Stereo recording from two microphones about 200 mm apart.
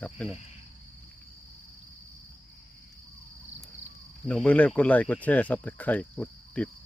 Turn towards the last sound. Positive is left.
turn(degrees=5)  # may be behind; listen again after turning